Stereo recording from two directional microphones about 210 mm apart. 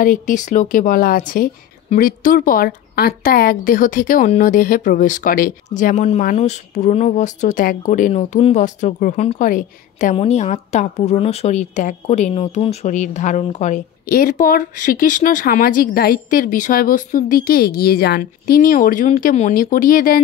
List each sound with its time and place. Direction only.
0.0 s a woman's voice: 40° left (ahead or behind)